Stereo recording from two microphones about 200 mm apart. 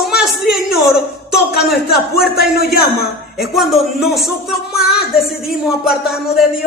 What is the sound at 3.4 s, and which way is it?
A woman's voice, centre (ahead or behind).